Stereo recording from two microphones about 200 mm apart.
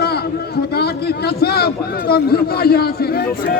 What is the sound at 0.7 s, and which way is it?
A man's voice, 55° left (ahead or behind).